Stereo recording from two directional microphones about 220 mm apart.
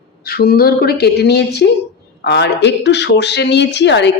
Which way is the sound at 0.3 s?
45° left (ahead or behind).